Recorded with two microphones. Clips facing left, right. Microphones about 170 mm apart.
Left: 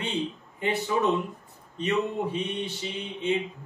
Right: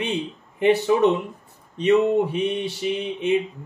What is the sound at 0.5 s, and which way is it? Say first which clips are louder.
Speech: right 10 dB; 75° right (ahead or behind).